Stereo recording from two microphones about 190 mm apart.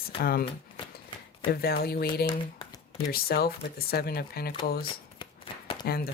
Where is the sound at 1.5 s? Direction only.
55° left (ahead or behind).